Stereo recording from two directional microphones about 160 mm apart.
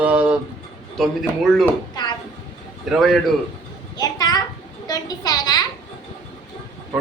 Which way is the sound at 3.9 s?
25° left (ahead or behind).